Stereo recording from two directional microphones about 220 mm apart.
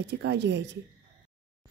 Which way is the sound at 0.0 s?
50° right (ahead or behind).